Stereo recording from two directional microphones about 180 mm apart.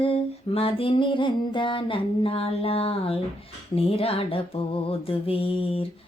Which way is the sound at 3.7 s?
35° left (ahead or behind).